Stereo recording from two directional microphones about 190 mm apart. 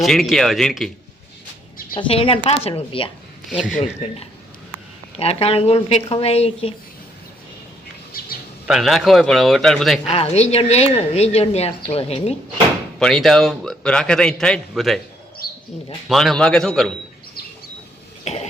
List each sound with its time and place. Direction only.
0.0 s a man's voice: centre (ahead or behind)
2.0 s speech: 30° left (ahead or behind)
3.4 s a man's voice: 5° right (ahead or behind)
5.1 s a woman's voice: 30° left (ahead or behind)
8.6 s a man's voice: centre (ahead or behind)
10.1 s a woman's voice: 30° left (ahead or behind)
13.0 s a man's voice: centre (ahead or behind)
15.4 s bird: 50° left (ahead or behind)
16.0 s a man's voice: centre (ahead or behind)
18.3 s cough: 35° left (ahead or behind)